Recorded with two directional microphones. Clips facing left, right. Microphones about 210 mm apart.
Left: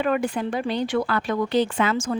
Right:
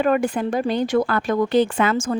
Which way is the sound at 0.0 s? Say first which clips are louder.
Right 4 dB; 45° right (ahead or behind).